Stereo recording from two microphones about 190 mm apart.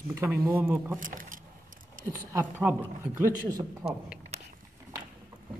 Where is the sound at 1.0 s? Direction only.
45° right (ahead or behind).